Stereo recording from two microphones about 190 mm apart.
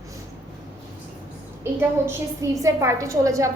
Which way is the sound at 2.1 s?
15° right (ahead or behind).